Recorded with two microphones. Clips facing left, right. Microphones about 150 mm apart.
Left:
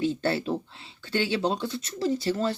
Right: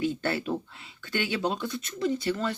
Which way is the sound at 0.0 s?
30° left (ahead or behind).